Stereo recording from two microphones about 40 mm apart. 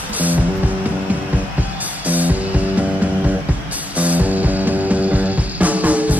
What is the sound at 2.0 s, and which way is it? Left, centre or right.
Music, right.